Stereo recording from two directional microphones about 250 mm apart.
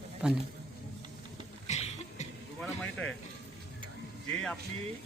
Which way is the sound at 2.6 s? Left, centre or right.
Centre.